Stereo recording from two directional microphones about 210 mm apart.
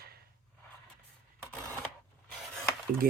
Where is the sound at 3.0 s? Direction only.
45° right (ahead or behind).